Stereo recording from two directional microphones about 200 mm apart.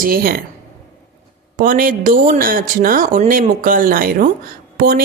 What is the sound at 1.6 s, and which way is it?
Speech, 45° right (ahead or behind).